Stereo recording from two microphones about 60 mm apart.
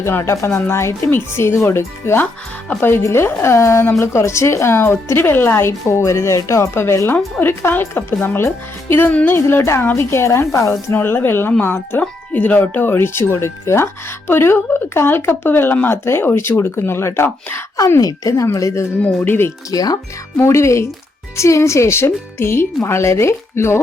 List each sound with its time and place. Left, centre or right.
0.0 s speech: left
7.3 s speech: left
10.9 s speech: left
18.0 s speech: left
18.9 s speech: left
19.7 s speech: left
20.3 s speech: left